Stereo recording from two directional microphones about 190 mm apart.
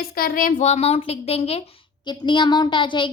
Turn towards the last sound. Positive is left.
turn(degrees=25)  # may be behind; listen again after turning